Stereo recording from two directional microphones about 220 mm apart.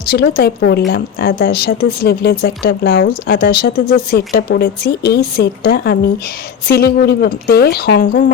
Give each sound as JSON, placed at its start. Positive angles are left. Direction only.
{"t": 0.1, "sound": "speech", "side_deg": 45}